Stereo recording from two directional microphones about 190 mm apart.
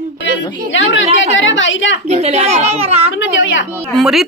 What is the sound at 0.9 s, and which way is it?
A woman's voice, 80° left.